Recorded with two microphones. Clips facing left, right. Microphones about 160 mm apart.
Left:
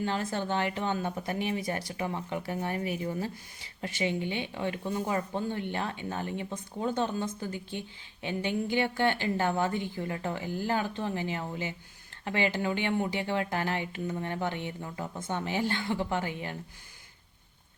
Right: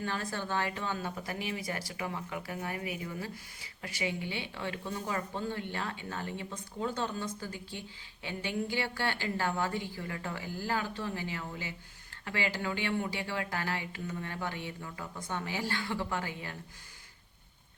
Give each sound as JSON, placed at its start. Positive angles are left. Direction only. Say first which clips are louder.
{"t": 0.0, "sound": "speech", "louder": "left 5 dB", "side_deg": 20}